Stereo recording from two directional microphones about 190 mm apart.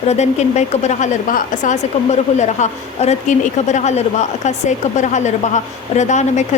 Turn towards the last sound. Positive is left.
turn(degrees=40)  # may be behind; listen again after turning